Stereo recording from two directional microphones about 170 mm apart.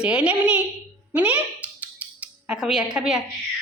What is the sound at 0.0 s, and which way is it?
Speech, 5° right (ahead or behind).